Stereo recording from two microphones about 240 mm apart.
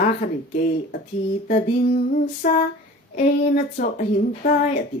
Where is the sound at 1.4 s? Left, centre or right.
Left.